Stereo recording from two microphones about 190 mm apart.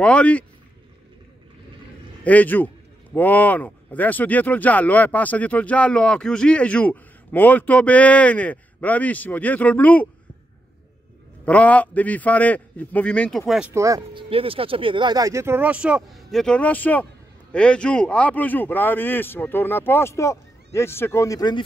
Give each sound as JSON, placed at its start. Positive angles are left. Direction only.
{"t": 0.0, "sound": "speech", "side_deg": 5}
{"t": 2.2, "sound": "speech", "side_deg": 10}
{"t": 11.4, "sound": "speech", "side_deg": 5}
{"t": 13.7, "sound": "speech", "side_deg": -15}
{"t": 14.3, "sound": "speech", "side_deg": -30}